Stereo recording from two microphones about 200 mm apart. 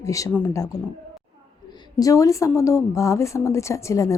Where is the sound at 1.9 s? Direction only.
15° left (ahead or behind).